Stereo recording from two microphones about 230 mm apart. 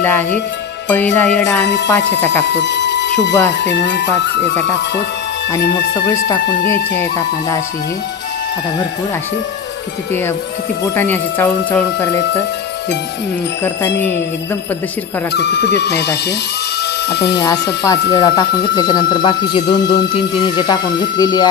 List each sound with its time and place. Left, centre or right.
0.0 s speech: centre
1.4 s speech: left
2.4 s a sound: left
3.6 s speech: left
5.9 s speech: centre
11.0 s speech: centre
15.3 s speech: left
18.1 s speech: centre